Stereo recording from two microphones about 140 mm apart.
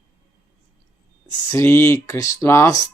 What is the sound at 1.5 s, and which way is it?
Speech, 20° left (ahead or behind).